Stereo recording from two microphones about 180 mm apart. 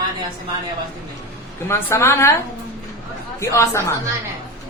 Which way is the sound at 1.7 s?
15° left (ahead or behind).